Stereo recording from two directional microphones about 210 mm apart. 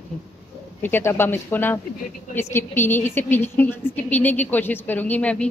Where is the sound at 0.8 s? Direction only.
10° left (ahead or behind).